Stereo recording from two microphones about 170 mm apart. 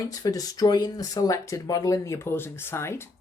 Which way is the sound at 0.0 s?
20° left (ahead or behind).